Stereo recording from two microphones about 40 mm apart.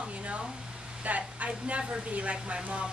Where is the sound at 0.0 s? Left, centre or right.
Right.